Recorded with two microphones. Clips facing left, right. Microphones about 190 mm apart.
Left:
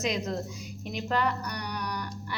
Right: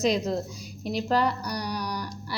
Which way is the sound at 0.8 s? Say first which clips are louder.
Right 4 dB; 35° right (ahead or behind).